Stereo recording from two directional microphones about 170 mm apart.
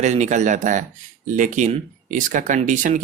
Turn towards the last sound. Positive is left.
turn(degrees=-50)  # may be behind; listen again after turning